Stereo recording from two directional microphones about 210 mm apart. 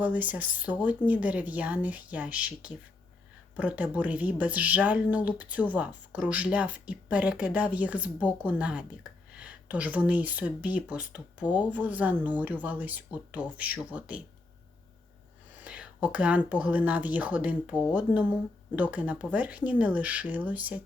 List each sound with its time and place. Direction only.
0.0 s speech: 5° right (ahead or behind)
15.6 s speech: 5° right (ahead or behind)